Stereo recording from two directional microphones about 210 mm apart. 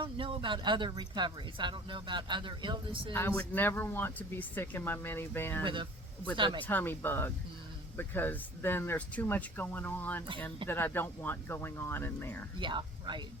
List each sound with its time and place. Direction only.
0.0 s speech: 25° right (ahead or behind)
3.1 s speech: 10° left (ahead or behind)
5.6 s speech: 25° right (ahead or behind)
6.6 s speech: 10° left (ahead or behind)
12.5 s speech: 20° right (ahead or behind)